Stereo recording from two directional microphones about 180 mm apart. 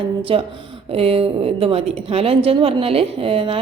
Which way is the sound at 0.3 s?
30° right (ahead or behind).